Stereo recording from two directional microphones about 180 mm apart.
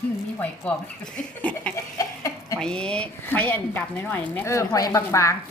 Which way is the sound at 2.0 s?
20° left (ahead or behind).